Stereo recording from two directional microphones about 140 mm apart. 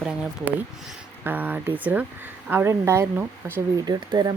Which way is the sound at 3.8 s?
30° right (ahead or behind).